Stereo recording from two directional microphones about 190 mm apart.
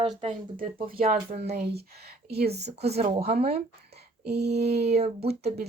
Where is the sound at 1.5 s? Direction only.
60° right (ahead or behind).